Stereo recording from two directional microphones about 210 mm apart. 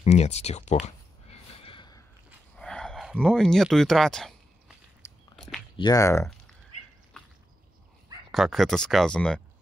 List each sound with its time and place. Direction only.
0.0 s speech: 30° left (ahead or behind)
1.6 s a sound: 25° left (ahead or behind)
2.5 s speech: 5° left (ahead or behind)
5.3 s walk: centre (ahead or behind)
5.8 s speech: 15° left (ahead or behind)
8.3 s speech: centre (ahead or behind)